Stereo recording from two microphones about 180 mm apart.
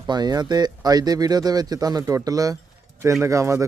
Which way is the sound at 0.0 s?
20° right (ahead or behind).